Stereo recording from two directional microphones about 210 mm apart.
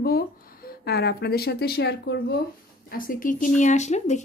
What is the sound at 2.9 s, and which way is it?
Speech, 40° left (ahead or behind).